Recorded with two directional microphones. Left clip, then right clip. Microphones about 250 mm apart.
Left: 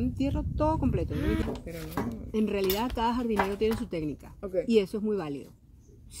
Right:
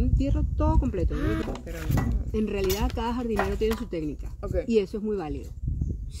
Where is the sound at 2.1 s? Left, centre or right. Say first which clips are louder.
Left 2 dB; left.